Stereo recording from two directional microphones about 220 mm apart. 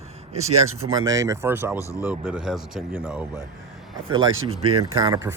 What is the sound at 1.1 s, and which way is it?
Speech, 15° right (ahead or behind).